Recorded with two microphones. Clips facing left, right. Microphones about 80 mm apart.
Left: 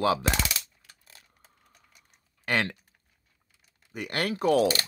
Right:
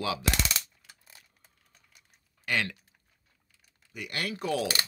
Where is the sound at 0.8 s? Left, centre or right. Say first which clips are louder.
Even; centre.